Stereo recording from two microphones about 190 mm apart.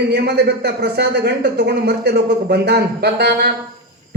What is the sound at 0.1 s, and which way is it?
Speech, 60° right (ahead or behind).